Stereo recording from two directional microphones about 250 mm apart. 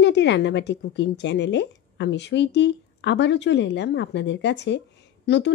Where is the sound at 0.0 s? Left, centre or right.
Left.